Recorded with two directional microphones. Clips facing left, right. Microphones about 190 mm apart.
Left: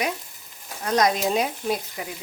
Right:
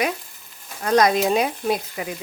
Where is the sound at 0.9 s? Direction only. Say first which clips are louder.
Right 4 dB; 65° right (ahead or behind).